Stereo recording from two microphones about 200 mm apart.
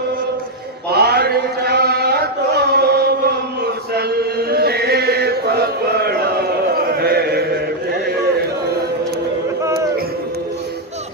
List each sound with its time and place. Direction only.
0.9 s chant: 55° right (ahead or behind)